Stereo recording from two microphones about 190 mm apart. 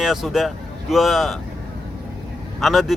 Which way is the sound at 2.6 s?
Centre (ahead or behind).